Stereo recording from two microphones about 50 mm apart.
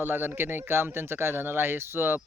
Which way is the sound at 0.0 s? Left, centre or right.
Right.